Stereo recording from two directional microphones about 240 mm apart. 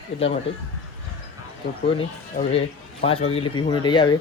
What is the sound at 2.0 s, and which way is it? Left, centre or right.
Speech, left.